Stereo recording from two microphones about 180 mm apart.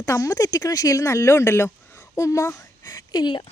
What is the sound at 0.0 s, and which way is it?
Speech, 15° left (ahead or behind).